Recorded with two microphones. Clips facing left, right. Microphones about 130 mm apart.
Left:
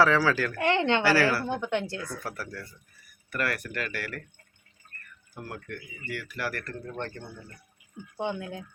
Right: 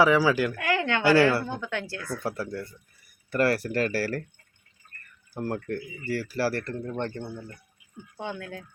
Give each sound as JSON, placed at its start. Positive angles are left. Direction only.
{"t": 0.0, "sound": "speech", "side_deg": -15}
{"t": 0.5, "sound": "a woman's voice", "side_deg": 25}
{"t": 1.0, "sound": "speech", "side_deg": -25}
{"t": 1.5, "sound": "a woman's voice", "side_deg": 20}
{"t": 2.2, "sound": "speech", "side_deg": -25}
{"t": 5.3, "sound": "speech", "side_deg": -35}
{"t": 8.1, "sound": "a woman's voice", "side_deg": 20}